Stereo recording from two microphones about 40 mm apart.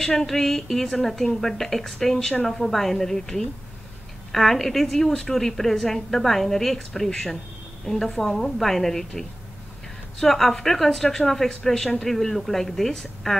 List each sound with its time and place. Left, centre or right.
0.3 s a woman's voice: centre